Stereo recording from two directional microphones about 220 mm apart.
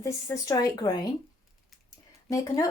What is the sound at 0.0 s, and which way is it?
Speech, 15° left (ahead or behind).